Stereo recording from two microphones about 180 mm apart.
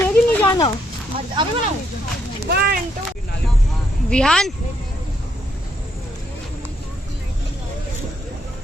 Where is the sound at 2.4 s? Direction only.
60° right (ahead or behind).